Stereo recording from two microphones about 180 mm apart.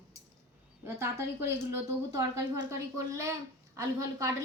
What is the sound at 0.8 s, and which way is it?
A woman's voice, 15° right (ahead or behind).